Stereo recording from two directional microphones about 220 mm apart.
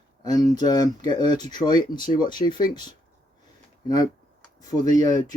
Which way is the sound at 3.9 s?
15° left (ahead or behind).